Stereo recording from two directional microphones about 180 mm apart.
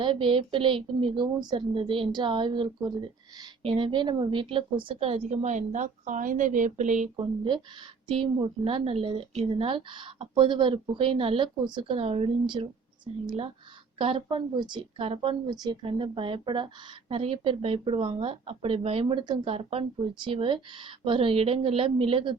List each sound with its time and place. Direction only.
0.0 s a woman's voice: 25° right (ahead or behind)
8.0 s a woman's voice: 30° right (ahead or behind)